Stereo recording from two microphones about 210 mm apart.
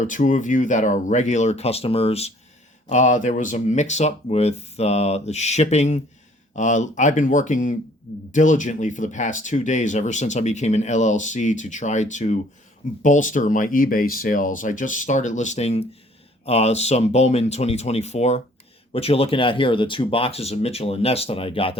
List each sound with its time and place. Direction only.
0.0 s speech: 35° left (ahead or behind)